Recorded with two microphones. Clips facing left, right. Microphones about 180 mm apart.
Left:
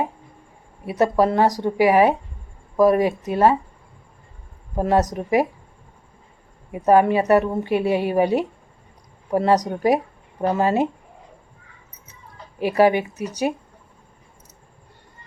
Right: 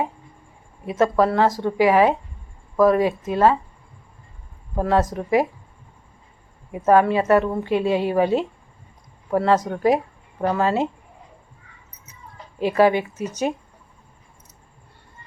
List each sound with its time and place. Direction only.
0.9 s a woman's voice: 15° left (ahead or behind)
4.8 s a woman's voice: 20° left (ahead or behind)
6.8 s a woman's voice: 15° left (ahead or behind)
12.5 s a woman's voice: 15° left (ahead or behind)